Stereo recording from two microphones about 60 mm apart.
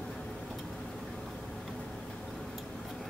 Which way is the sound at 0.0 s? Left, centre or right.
Centre.